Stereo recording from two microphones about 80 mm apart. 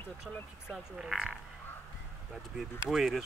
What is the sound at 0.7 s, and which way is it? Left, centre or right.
Speech, centre.